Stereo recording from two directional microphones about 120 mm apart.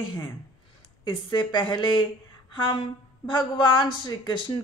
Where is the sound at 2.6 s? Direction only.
55° left (ahead or behind).